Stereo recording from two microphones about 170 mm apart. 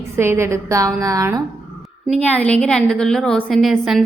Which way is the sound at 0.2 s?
15° right (ahead or behind).